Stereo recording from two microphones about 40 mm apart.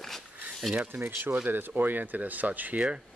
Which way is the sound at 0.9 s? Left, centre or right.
Right.